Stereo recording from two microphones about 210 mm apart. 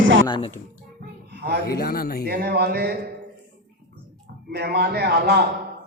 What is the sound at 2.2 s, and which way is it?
Speech, 50° right (ahead or behind).